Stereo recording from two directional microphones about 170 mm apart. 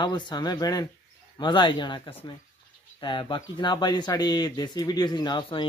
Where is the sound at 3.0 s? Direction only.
30° left (ahead or behind).